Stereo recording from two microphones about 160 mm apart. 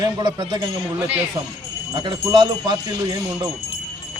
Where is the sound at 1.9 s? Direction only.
30° right (ahead or behind).